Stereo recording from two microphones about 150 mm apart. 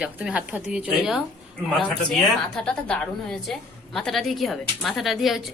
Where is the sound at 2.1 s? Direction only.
5° left (ahead or behind).